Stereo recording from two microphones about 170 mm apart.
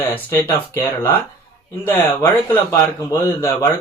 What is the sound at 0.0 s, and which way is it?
Speech, 10° left (ahead or behind).